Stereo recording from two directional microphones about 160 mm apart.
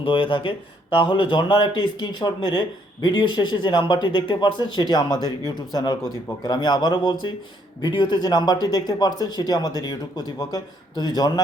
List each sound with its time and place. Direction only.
0.0 s speech: 35° left (ahead or behind)